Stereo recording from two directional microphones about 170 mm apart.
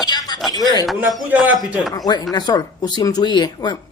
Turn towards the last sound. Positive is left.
turn(degrees=25)  # may be behind; listen again after turning